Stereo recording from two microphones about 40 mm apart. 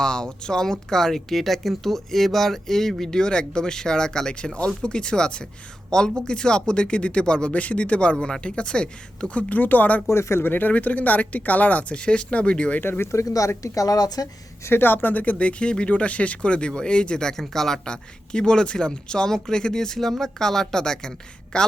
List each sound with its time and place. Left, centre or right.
0.0 s speech: centre
7.5 s speech: left
9.5 s speech: left
10.3 s speech: left
10.7 s speech: left
11.9 s speech: left
12.8 s speech: left
14.7 s speech: left
15.2 s speech: left; by 17.7 s centre
17.8 s speech: left